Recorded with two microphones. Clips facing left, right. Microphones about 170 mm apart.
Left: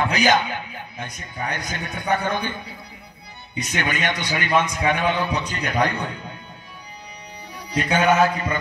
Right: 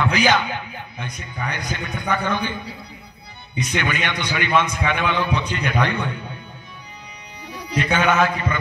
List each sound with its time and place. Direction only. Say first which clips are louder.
0.0 s a man's voice: even; 45° left (ahead or behind)
3.6 s a man's voice: right 1 dB; 45° left (ahead or behind)
7.8 s music: left 1 dB; 40° left (ahead or behind)